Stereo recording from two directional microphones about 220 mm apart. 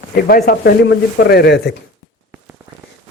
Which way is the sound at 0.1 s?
45° left (ahead or behind).